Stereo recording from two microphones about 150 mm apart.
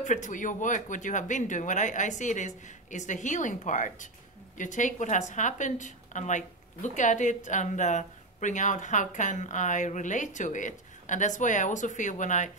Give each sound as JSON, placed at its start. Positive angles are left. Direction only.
{"t": 0.0, "sound": "a woman's voice", "side_deg": 55}